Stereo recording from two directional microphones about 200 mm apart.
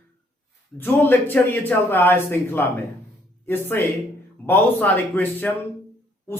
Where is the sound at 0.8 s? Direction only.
10° left (ahead or behind).